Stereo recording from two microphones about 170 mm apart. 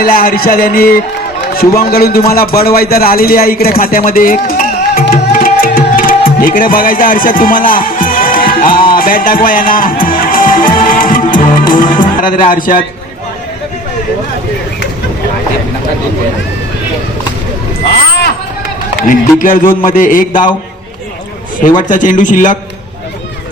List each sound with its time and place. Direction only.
0.0 s a man's voice: 60° left (ahead or behind)
2.7 s music: 60° left (ahead or behind)
19.0 s a man's voice: 55° left (ahead or behind)
21.8 s a man's voice: 50° left (ahead or behind)